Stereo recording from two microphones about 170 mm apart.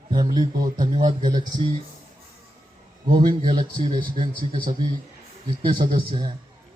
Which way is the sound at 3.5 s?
25° right (ahead or behind).